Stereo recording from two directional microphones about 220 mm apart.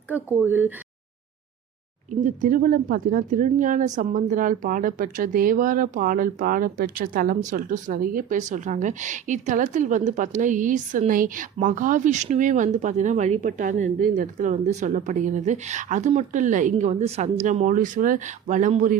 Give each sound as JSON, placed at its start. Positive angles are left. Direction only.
{"t": 0.1, "sound": "speech", "side_deg": -10}
{"t": 2.0, "sound": "speech", "side_deg": -35}